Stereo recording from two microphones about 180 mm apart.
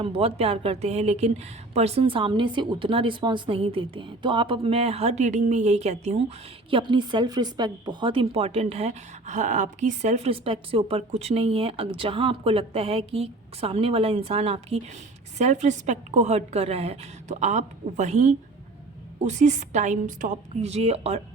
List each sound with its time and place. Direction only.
0.0 s speech: 30° right (ahead or behind)